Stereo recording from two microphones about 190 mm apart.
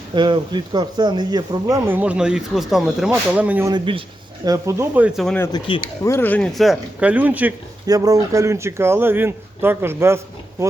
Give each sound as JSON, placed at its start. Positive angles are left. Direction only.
{"t": 0.1, "sound": "speech", "side_deg": -25}
{"t": 3.7, "sound": "speech", "side_deg": -25}
{"t": 5.4, "sound": "speech", "side_deg": 20}
{"t": 6.0, "sound": "speech", "side_deg": 15}